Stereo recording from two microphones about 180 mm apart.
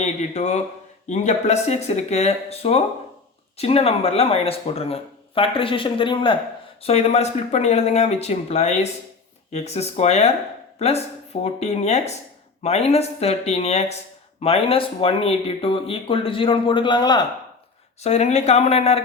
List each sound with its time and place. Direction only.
0.0 s speech: 40° left (ahead or behind); by 17.2 s 25° left (ahead or behind)
18.0 s speech: 40° left (ahead or behind)